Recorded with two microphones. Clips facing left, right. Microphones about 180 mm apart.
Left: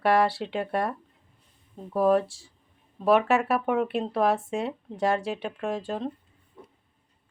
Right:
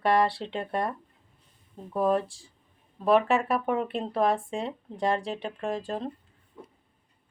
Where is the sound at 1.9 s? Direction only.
Centre (ahead or behind).